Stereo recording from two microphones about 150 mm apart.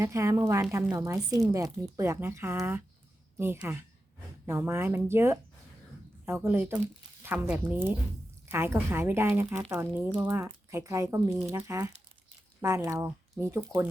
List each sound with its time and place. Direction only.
0.0 s speech: 20° right (ahead or behind)